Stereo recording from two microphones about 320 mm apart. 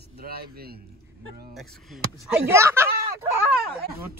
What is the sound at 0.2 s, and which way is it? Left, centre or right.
Speech, right.